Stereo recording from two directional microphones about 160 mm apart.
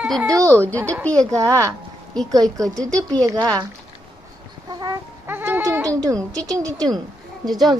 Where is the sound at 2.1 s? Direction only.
5° left (ahead or behind).